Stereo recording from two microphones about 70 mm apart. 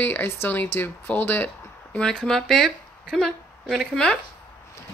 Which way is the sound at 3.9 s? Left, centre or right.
Centre.